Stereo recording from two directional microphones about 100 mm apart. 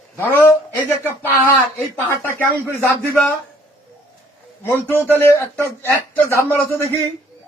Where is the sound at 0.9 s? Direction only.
20° left (ahead or behind).